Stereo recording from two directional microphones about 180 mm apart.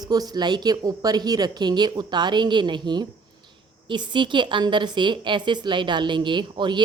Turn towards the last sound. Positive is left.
turn(degrees=-25)  # may be behind; listen again after turning